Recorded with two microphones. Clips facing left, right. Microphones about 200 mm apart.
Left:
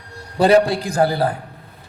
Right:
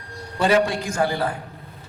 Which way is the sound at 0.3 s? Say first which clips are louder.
Left 5 dB; 35° left (ahead or behind).